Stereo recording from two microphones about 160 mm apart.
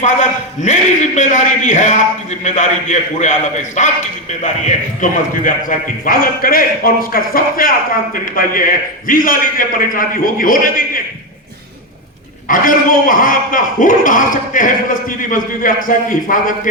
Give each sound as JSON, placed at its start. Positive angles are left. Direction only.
{"t": 0.0, "sound": "a man's voice", "side_deg": 50}
{"t": 12.5, "sound": "a man's voice", "side_deg": 60}